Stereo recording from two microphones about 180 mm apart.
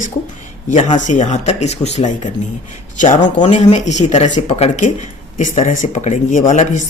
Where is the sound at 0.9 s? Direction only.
45° left (ahead or behind).